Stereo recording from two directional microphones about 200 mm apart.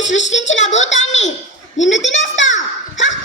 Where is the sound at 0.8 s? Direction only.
65° left (ahead or behind).